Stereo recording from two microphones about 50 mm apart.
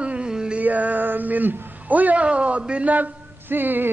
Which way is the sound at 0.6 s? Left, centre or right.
Right.